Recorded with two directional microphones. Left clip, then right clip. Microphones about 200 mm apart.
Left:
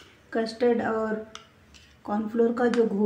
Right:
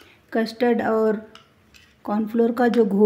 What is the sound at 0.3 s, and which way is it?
Speech, 45° right (ahead or behind).